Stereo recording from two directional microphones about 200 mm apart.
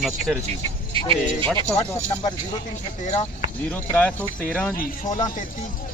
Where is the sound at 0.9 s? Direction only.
25° right (ahead or behind).